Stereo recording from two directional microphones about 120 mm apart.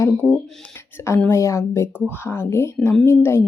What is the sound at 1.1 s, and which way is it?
Speech, 20° left (ahead or behind).